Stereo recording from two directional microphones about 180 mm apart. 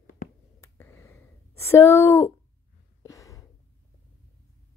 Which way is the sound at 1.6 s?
15° left (ahead or behind).